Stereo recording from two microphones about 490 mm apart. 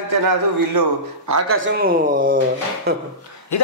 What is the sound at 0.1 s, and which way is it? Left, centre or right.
Speech, right.